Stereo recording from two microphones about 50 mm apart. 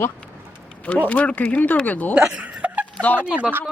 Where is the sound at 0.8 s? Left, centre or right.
Left.